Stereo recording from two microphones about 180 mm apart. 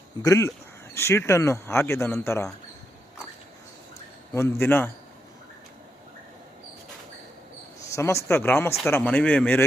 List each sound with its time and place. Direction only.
0.2 s speech: 15° left (ahead or behind)
4.4 s speech: 15° left (ahead or behind)
7.9 s speech: 15° left (ahead or behind)